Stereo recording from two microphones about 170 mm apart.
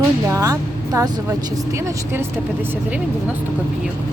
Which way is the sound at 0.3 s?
20° right (ahead or behind).